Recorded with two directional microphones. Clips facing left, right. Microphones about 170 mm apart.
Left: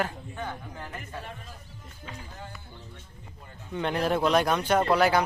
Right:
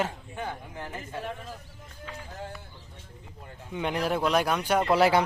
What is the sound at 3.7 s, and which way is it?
A man's voice, 10° right (ahead or behind).